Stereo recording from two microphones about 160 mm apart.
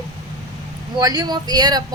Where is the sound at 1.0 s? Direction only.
25° right (ahead or behind).